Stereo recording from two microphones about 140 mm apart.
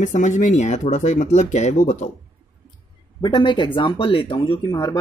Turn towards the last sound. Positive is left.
turn(degrees=30)  # may be behind; listen again after turning